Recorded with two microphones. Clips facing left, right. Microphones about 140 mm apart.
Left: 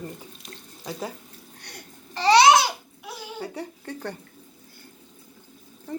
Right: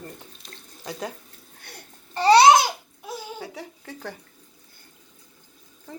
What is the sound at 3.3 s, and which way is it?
Speech, centre (ahead or behind).